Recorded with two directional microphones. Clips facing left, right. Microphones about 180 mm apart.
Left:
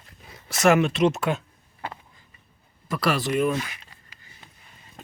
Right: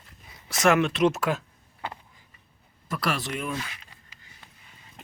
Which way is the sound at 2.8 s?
Centre (ahead or behind).